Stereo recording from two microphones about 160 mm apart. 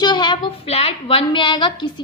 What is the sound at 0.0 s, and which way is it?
A woman's voice, 25° left (ahead or behind).